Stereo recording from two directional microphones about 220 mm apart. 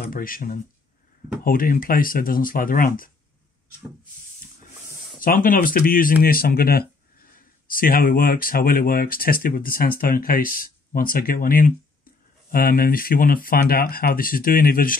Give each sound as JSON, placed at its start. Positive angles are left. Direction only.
{"t": 0.0, "sound": "speech", "side_deg": 40}
{"t": 5.2, "sound": "speech", "side_deg": 40}